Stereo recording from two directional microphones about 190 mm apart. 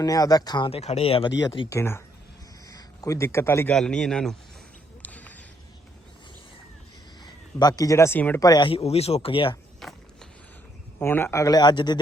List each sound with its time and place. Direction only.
0.0 s speech: 20° left (ahead or behind)
1.4 s a man's voice: 20° left (ahead or behind); by 4.4 s 5° left (ahead or behind)
5.0 s a sound: 10° left (ahead or behind)
7.6 s speech: 20° left (ahead or behind)
9.8 s skateboard: centre (ahead or behind)
11.0 s a man's voice: 10° left (ahead or behind)